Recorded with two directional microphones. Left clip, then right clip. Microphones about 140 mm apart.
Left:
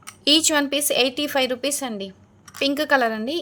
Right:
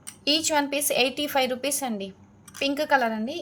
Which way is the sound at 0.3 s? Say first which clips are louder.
Left 5 dB; 50° left (ahead or behind).